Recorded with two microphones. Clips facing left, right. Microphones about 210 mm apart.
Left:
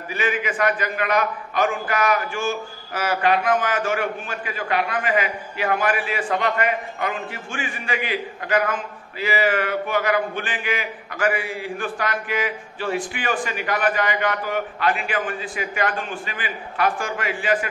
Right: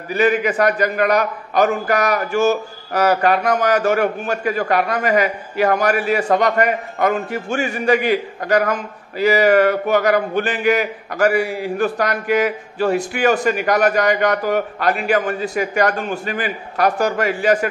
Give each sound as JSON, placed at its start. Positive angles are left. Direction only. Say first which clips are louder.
{"t": 0.1, "sound": "a man's voice", "louder": "right 9 dB", "side_deg": -40}